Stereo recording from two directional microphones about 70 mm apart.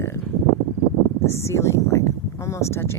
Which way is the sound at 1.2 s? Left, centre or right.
Left.